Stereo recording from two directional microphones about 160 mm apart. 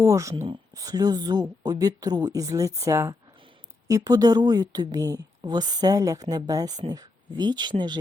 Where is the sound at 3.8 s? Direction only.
20° right (ahead or behind).